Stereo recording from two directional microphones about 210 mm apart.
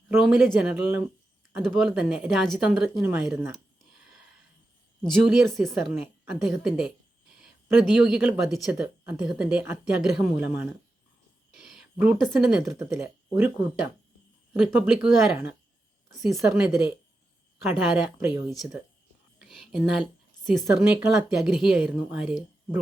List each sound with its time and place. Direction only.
0.2 s a woman's voice: 5° right (ahead or behind)
5.0 s a woman's voice: centre (ahead or behind)
17.9 s a woman's voice: 5° right (ahead or behind)